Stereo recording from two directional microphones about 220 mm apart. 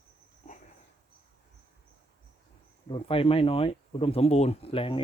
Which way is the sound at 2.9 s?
25° left (ahead or behind).